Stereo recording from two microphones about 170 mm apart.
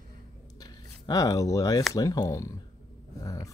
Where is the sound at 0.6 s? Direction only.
20° left (ahead or behind).